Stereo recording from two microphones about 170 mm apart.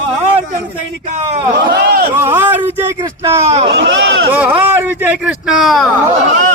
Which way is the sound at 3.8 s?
90° right.